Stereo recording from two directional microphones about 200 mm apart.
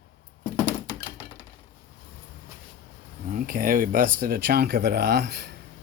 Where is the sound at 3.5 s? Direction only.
45° right (ahead or behind).